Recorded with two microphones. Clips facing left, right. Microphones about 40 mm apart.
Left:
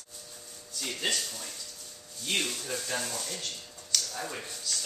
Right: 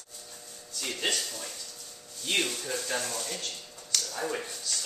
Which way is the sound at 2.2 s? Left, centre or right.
Centre.